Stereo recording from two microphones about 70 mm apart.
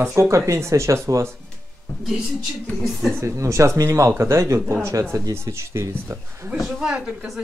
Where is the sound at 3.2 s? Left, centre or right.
Right.